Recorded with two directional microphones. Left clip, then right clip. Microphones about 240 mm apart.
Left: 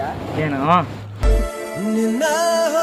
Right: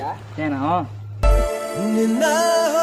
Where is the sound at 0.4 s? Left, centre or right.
Left.